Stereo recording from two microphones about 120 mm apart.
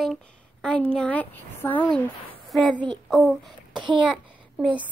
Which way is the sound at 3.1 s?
Centre (ahead or behind).